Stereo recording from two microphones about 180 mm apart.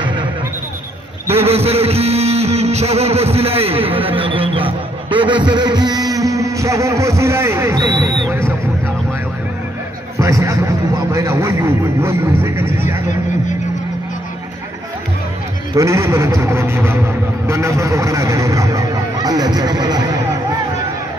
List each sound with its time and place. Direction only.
0.0 s music: 25° right (ahead or behind)
1.3 s music: 35° right (ahead or behind); by 8.5 s 15° right (ahead or behind)
10.1 s a man's voice: 15° right (ahead or behind)
15.7 s a man's voice: 15° right (ahead or behind)